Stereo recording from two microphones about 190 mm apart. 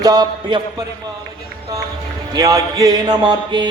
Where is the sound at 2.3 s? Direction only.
20° right (ahead or behind).